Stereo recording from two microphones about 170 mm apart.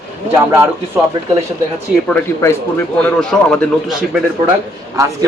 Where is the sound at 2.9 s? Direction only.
5° left (ahead or behind).